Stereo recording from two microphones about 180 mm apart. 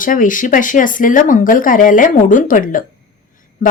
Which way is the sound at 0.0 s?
50° left (ahead or behind).